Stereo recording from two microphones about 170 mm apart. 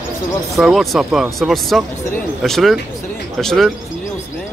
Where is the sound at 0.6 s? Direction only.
Centre (ahead or behind).